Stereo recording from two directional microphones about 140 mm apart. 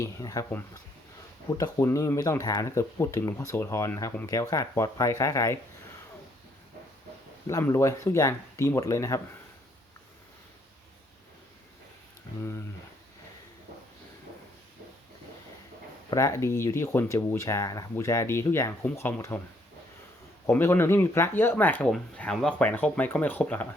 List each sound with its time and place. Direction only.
0.0 s speech: 25° left (ahead or behind)
1.5 s speech: 25° left (ahead or behind)
7.7 s speech: 20° left (ahead or behind)
12.4 s speech: 20° left (ahead or behind)
16.0 s speech: 25° left (ahead or behind)
20.5 s speech: 15° left (ahead or behind)